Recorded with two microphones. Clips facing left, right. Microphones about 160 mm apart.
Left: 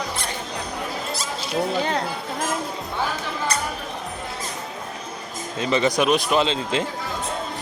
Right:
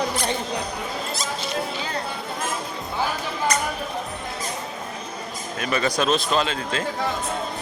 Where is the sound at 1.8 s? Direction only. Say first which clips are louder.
Left 6 dB; 75° left (ahead or behind).